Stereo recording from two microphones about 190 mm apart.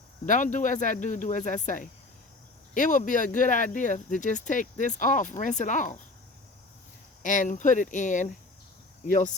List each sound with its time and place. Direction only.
0.3 s speech: 40° left (ahead or behind)
7.2 s speech: 40° left (ahead or behind)